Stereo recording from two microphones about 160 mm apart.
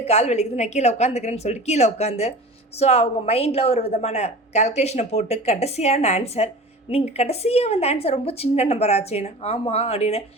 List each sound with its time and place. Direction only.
0.0 s a woman's voice: 40° left (ahead or behind)